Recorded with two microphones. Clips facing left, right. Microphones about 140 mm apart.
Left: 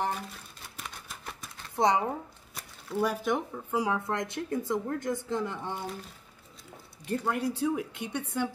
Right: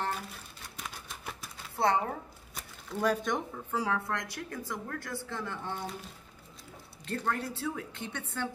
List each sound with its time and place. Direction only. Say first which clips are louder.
0.7 s a sound: even; centre (ahead or behind)
1.8 s speech: left 3 dB; 15° left (ahead or behind)
2.5 s speech: left 5 dB; 5° left (ahead or behind)
7.1 s speech: left 4 dB; 15° left (ahead or behind)